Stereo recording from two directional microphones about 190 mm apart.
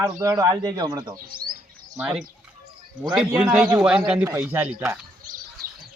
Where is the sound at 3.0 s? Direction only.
Centre (ahead or behind).